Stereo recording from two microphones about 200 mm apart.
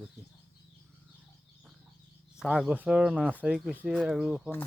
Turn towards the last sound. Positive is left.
turn(degrees=-5)  # may be behind; listen again after turning